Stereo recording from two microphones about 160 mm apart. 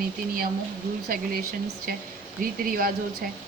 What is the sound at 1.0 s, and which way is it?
Speech, 70° right (ahead or behind).